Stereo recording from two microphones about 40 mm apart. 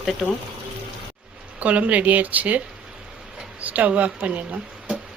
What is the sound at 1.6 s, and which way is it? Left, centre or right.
Speech, right.